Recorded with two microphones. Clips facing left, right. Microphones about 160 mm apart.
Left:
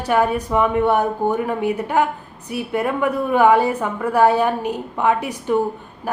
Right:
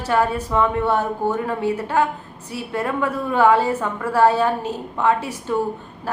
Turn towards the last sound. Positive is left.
turn(degrees=15)  # may be behind; listen again after turning